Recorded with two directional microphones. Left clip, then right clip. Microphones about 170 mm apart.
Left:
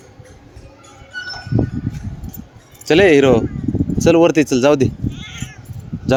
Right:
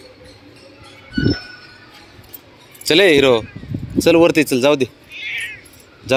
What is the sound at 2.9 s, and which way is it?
Speech, 25° left (ahead or behind).